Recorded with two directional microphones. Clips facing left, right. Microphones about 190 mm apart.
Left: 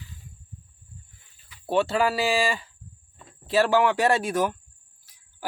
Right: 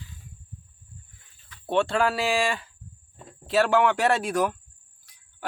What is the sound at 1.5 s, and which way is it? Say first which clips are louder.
Speech: left 1 dB; 5° left (ahead or behind).